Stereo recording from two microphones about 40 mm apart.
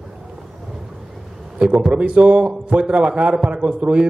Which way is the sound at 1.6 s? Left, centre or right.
Right.